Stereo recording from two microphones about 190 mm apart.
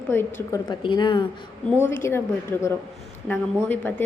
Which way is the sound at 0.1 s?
15° left (ahead or behind).